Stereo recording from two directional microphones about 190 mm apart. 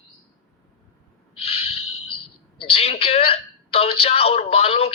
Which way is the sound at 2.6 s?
30° left (ahead or behind).